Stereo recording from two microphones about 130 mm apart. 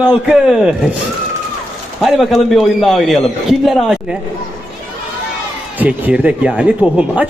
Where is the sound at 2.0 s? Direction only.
Centre (ahead or behind).